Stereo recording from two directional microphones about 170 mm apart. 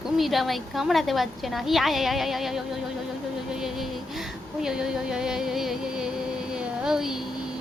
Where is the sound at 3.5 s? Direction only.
Centre (ahead or behind).